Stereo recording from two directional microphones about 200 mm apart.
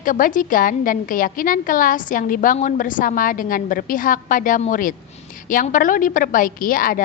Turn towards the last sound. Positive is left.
turn(degrees=45)  # may be behind; listen again after turning